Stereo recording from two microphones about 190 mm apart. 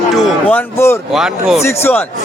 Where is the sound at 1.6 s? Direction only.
10° left (ahead or behind).